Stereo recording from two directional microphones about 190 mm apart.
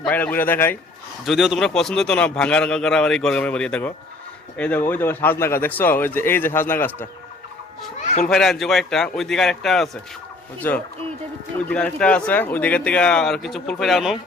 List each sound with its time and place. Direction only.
0.0 s speech: 10° left (ahead or behind)
1.2 s a man's voice: centre (ahead or behind)
8.0 s a sound: 35° left (ahead or behind)
8.3 s a man's voice: centre (ahead or behind)